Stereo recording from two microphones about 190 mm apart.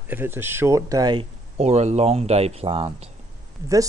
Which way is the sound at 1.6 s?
35° right (ahead or behind).